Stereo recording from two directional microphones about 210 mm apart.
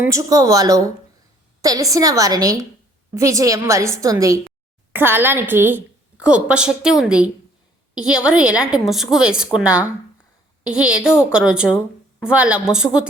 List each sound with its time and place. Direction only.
0.0 s a woman's voice: 15° right (ahead or behind)
11.0 s a woman's voice: 10° left (ahead or behind)
11.3 s a woman's voice: 5° right (ahead or behind)